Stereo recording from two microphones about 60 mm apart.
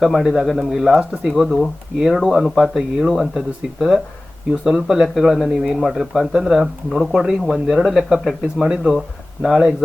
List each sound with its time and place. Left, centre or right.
0.0 s a man's voice: centre